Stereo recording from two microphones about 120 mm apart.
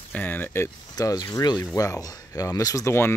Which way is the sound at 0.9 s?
35° left (ahead or behind).